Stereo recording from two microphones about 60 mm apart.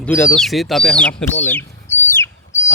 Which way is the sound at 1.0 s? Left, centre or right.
Centre.